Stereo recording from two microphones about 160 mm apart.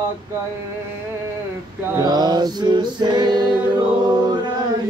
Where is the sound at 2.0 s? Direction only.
25° right (ahead or behind).